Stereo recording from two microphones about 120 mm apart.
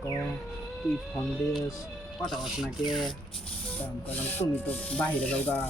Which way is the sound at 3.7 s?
15° left (ahead or behind).